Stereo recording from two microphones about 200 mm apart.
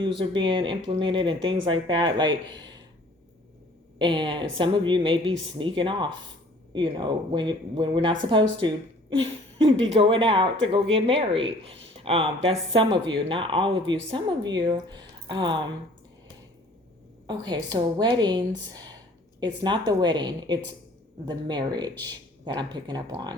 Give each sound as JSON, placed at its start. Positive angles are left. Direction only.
{"t": 0.0, "sound": "speech", "side_deg": -25}
{"t": 3.9, "sound": "a woman's voice", "side_deg": -25}
{"t": 17.2, "sound": "speech", "side_deg": -20}